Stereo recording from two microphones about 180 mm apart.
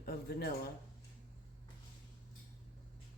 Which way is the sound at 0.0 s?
60° left (ahead or behind).